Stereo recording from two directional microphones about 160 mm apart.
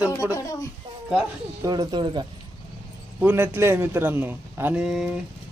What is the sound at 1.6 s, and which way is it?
Speech, 25° right (ahead or behind).